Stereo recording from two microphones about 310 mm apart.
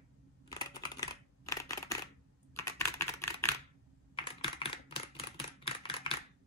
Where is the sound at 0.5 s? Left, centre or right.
Centre.